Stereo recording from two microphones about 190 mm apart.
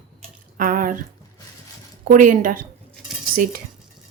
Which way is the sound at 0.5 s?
45° right (ahead or behind).